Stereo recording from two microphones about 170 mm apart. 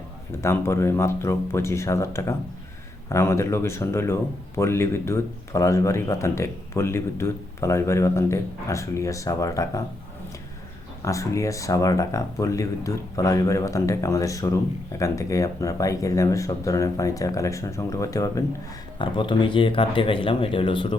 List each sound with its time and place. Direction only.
0.4 s speech: 15° left (ahead or behind)
11.0 s speech: 20° left (ahead or behind)